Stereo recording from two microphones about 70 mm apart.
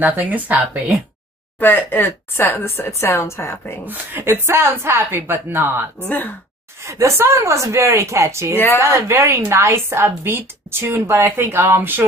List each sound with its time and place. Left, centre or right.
0.0 s speech: right
1.6 s a woman's voice: left
3.8 s speech: right
6.0 s speech: left
6.8 s speech: right